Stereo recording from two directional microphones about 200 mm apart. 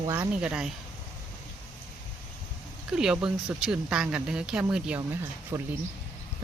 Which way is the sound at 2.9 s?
5° right (ahead or behind).